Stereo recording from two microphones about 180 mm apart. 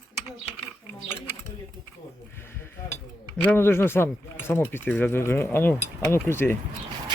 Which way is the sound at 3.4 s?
15° left (ahead or behind).